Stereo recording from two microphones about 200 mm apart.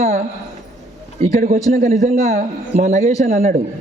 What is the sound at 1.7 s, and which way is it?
A man's voice, 40° right (ahead or behind).